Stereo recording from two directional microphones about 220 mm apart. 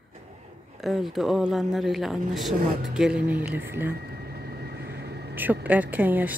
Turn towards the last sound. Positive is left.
turn(degrees=-5)  # may be behind; listen again after turning